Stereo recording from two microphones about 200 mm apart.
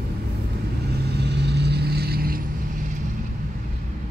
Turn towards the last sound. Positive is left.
turn(degrees=-50)  # may be behind; listen again after turning